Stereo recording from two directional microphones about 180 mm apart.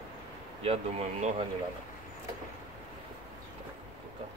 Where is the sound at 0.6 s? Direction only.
35° right (ahead or behind).